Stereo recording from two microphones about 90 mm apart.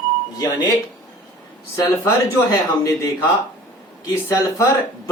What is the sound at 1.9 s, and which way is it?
Speech, 35° left (ahead or behind).